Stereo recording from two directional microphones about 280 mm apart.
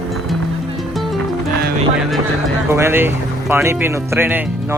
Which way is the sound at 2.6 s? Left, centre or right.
Centre.